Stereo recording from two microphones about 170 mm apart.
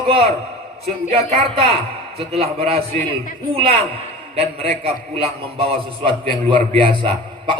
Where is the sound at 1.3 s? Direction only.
35° right (ahead or behind).